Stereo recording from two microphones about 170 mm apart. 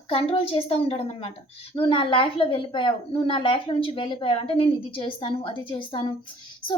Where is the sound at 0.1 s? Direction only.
35° left (ahead or behind).